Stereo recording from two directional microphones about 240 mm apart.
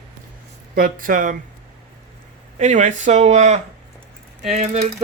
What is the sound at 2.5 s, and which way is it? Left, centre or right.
Speech, right.